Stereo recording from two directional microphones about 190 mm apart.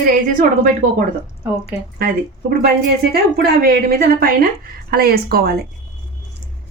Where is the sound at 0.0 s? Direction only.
45° right (ahead or behind).